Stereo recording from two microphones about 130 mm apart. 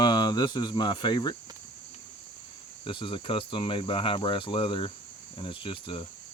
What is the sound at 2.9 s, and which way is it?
Speech, 40° left (ahead or behind).